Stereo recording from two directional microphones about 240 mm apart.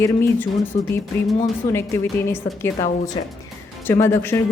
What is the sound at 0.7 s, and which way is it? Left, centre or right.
Speech, left.